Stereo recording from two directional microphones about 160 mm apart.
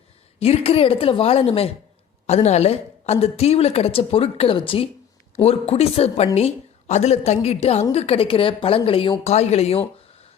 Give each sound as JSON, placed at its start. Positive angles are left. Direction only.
{"t": 0.3, "sound": "a woman's voice", "side_deg": 40}